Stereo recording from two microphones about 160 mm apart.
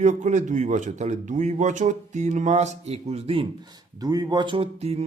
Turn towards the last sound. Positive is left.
turn(degrees=-40)  # may be behind; listen again after turning